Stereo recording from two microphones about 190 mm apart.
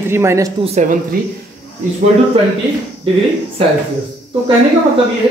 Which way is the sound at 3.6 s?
30° right (ahead or behind).